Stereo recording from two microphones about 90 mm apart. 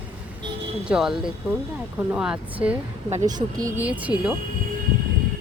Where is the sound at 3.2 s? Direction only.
45° right (ahead or behind).